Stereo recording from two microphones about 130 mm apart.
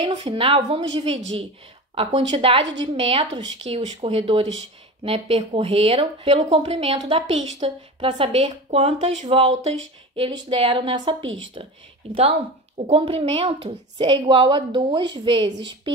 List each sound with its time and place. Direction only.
0.1 s a woman's voice: 45° right (ahead or behind)